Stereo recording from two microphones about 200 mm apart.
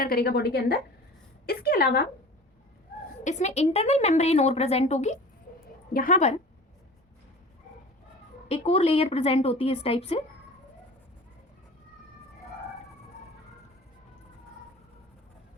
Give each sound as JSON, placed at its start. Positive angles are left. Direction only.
{"t": 0.0, "sound": "a woman's voice", "side_deg": 50}
{"t": 3.2, "sound": "a woman's voice", "side_deg": 35}
{"t": 8.4, "sound": "a woman's voice", "side_deg": 30}